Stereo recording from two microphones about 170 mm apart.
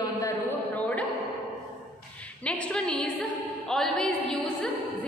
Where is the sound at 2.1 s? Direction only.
10° left (ahead or behind).